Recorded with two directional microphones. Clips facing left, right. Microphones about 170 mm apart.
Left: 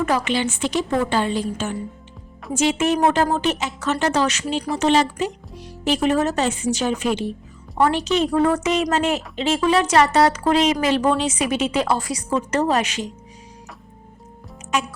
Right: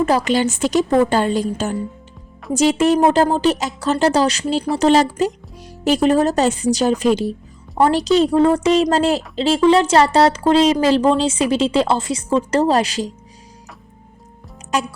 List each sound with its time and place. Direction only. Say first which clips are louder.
0.3 s a woman's voice: right 5 dB; 40° right (ahead or behind)
14.7 s a woman's voice: right 3 dB; 35° right (ahead or behind)